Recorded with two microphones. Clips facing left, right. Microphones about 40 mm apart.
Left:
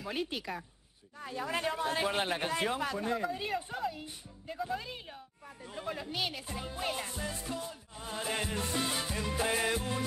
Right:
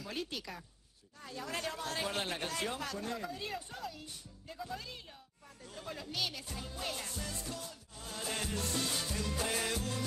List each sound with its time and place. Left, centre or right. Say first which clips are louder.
0.0 s speech: left 5 dB; left